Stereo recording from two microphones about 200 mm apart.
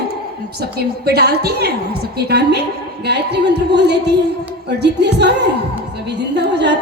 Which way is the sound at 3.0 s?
55° right (ahead or behind).